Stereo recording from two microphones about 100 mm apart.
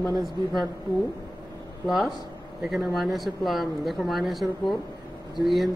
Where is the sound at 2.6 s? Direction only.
Centre (ahead or behind).